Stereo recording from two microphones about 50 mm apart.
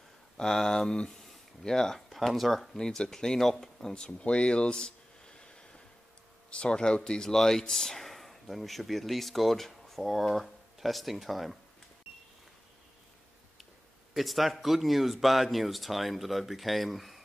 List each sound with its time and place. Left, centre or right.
0.4 s speech: centre
14.1 s speech: centre